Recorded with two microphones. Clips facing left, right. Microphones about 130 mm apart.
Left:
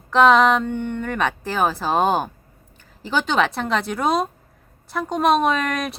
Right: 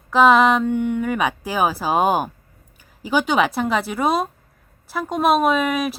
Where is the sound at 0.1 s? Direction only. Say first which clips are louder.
Even; 5° right (ahead or behind).